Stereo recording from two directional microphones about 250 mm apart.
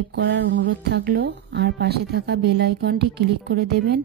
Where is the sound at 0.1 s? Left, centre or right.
Right.